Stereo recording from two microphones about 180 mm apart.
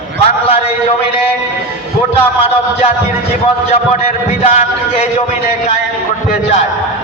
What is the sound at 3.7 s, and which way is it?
A man's voice, 35° left (ahead or behind).